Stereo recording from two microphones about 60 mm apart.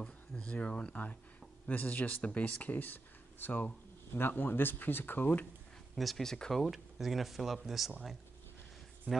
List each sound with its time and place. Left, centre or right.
0.0 s speech: centre
5.9 s speech: centre
6.3 s speech: centre
6.6 s speech: centre
9.1 s speech: right